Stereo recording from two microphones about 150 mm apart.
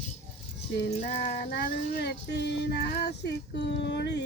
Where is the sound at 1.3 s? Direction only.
85° left.